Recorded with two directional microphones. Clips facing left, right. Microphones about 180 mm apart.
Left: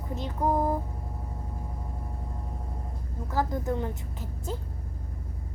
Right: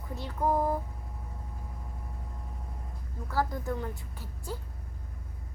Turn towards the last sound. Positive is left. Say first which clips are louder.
# left 4 dB
turn(degrees=20)  # may be behind; listen again after turning